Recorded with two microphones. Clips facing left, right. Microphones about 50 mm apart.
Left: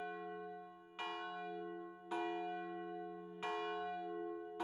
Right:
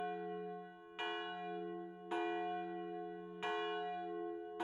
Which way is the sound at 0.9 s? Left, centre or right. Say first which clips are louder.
Right 2 dB; right.